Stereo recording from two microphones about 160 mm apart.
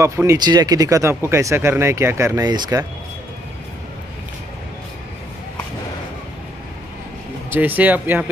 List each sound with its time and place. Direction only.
0.0 s speech: 20° right (ahead or behind)
7.5 s speech: 10° right (ahead or behind)